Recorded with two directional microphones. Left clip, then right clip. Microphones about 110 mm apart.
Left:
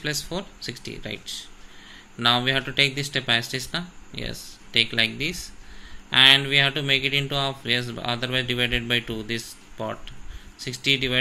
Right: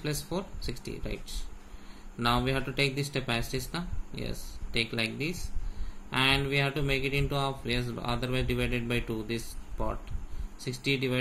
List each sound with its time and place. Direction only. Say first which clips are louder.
0.0 s speech: left 6 dB; 20° left (ahead or behind)